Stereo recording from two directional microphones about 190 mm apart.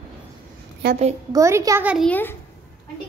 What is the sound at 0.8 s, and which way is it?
Speech, 55° right (ahead or behind).